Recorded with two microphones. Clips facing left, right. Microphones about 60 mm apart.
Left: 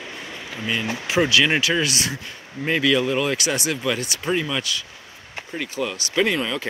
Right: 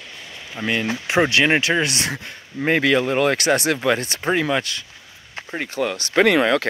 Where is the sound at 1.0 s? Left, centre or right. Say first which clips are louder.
Right 1 dB; right.